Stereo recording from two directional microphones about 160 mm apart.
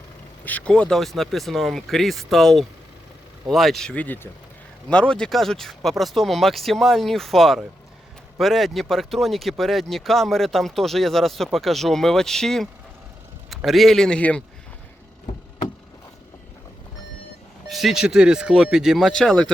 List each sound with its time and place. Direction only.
0.4 s speech: 10° left (ahead or behind)
17.7 s speech: centre (ahead or behind)